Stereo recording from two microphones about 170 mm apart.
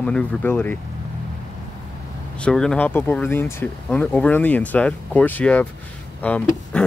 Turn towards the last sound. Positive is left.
turn(degrees=10)  # may be behind; listen again after turning